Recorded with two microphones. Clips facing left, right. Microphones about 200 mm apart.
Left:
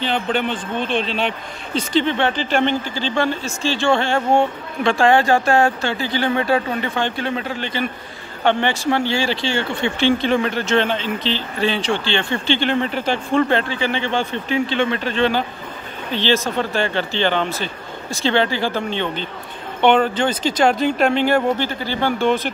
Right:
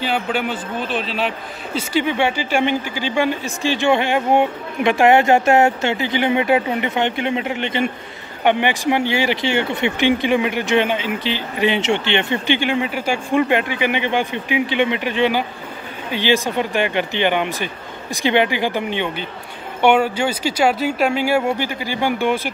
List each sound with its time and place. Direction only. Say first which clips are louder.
0.0 s a man's voice: even; 10° right (ahead or behind)